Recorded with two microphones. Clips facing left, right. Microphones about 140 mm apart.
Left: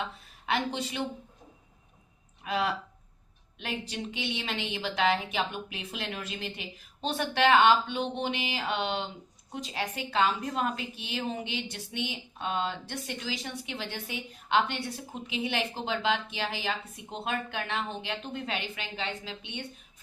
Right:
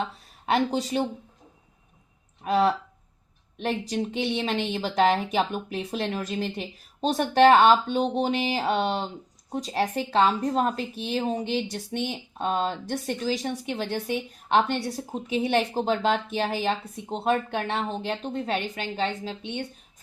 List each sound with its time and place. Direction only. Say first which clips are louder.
0.0 s speech: right 5 dB; 40° right (ahead or behind)
2.4 s a woman's voice: right 8 dB; 40° right (ahead or behind)